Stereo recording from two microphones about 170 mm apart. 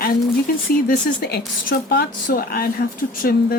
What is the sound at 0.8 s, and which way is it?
Speech, 70° left (ahead or behind).